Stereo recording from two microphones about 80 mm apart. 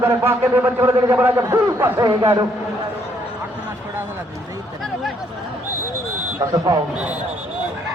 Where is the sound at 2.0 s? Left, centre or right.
Right.